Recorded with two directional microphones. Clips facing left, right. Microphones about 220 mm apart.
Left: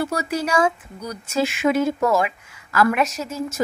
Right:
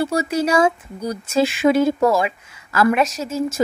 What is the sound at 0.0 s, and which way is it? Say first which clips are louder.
Speech: right 4 dB; 25° right (ahead or behind).